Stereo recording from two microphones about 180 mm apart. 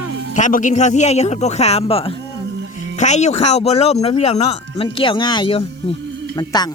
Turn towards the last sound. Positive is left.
turn(degrees=20)  # may be behind; listen again after turning